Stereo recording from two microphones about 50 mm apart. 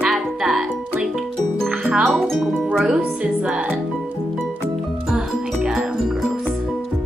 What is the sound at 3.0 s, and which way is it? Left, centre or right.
Music, right.